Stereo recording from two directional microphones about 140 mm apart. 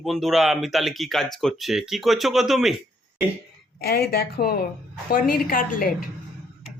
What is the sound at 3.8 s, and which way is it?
A woman's voice, 90° left.